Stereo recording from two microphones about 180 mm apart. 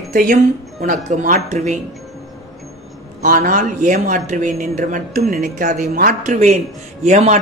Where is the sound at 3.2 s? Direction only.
45° right (ahead or behind).